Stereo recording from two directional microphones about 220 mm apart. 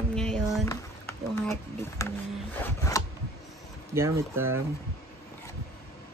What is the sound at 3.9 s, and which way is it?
Speech, 15° right (ahead or behind).